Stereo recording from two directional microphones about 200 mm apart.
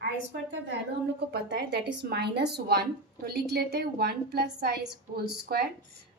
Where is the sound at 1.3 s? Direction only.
55° right (ahead or behind).